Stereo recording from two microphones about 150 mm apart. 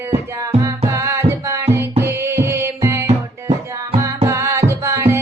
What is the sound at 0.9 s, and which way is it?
Music, 20° right (ahead or behind).